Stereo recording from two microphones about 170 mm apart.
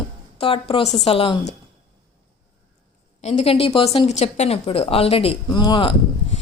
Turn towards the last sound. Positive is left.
turn(degrees=30)  # may be behind; listen again after turning